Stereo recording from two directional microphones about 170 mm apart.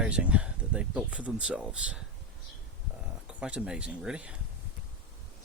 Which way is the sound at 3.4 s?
5° right (ahead or behind).